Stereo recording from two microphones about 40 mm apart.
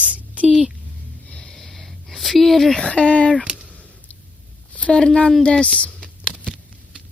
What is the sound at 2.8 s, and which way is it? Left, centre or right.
Speech, left.